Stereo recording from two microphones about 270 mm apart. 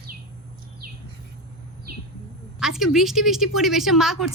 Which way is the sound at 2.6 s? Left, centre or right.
Centre.